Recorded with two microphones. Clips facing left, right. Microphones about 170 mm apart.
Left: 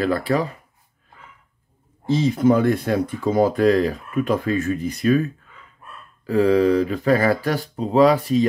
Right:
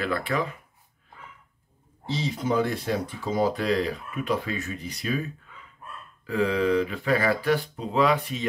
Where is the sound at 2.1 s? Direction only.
50° left (ahead or behind).